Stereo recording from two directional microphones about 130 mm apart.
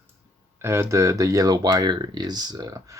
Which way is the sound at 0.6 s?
20° right (ahead or behind).